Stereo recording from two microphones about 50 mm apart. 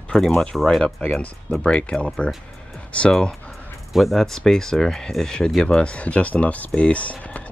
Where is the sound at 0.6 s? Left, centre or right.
Centre.